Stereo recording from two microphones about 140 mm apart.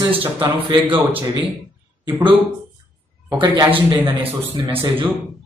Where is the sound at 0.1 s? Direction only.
40° right (ahead or behind).